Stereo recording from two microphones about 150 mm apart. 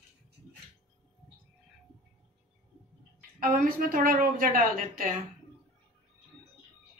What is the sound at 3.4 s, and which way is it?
A woman's voice, 70° right (ahead or behind).